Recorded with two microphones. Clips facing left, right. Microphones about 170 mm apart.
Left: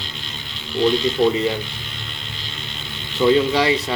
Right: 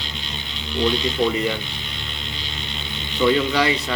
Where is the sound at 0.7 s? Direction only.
Centre (ahead or behind).